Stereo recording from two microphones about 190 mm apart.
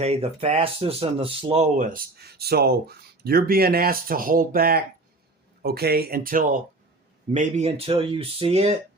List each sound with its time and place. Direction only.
0.0 s speech: 30° right (ahead or behind)